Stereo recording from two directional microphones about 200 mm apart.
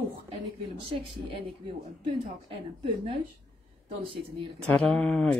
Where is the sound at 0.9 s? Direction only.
25° right (ahead or behind).